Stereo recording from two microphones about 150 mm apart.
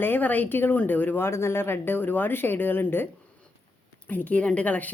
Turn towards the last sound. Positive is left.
turn(degrees=10)  # may be behind; listen again after turning